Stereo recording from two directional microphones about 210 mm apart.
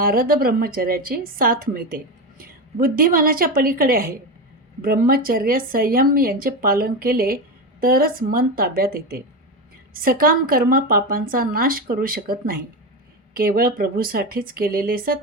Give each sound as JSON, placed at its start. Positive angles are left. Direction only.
{"t": 0.0, "sound": "speech", "side_deg": -45}